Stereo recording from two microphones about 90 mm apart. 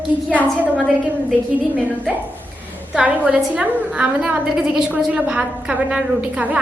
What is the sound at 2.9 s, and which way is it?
A woman's voice, 15° right (ahead or behind).